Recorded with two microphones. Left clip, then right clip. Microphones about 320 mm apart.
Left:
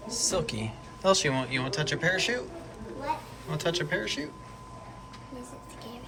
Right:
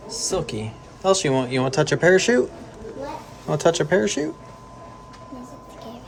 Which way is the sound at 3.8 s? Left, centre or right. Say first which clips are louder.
Right 10 dB; centre.